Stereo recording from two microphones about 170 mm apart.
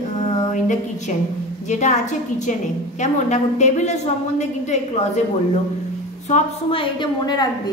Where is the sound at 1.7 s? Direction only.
45° left (ahead or behind).